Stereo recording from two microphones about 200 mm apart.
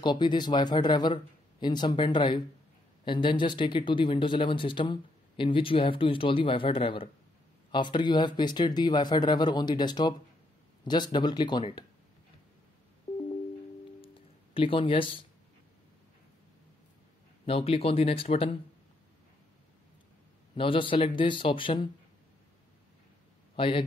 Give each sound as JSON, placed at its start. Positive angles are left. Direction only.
{"t": 0.0, "sound": "speech", "side_deg": 20}
{"t": 14.0, "sound": "music", "side_deg": 25}
{"t": 17.5, "sound": "speech", "side_deg": 30}
{"t": 20.5, "sound": "speech", "side_deg": 25}
{"t": 23.5, "sound": "a man's voice", "side_deg": 25}